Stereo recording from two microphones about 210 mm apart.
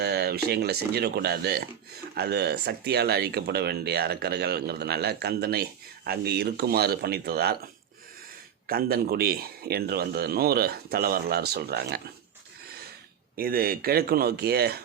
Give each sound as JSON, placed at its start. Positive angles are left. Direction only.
{"t": 0.0, "sound": "speech", "side_deg": -50}
{"t": 8.6, "sound": "speech", "side_deg": -45}
{"t": 13.3, "sound": "speech", "side_deg": -45}